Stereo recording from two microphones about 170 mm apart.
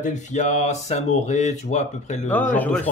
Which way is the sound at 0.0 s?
45° left (ahead or behind).